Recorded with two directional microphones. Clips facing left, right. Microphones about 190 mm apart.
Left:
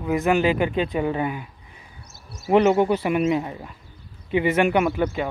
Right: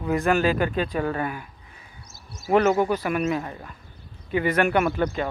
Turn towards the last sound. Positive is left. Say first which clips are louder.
# left 1 dB
turn(degrees=10)  # may be behind; listen again after turning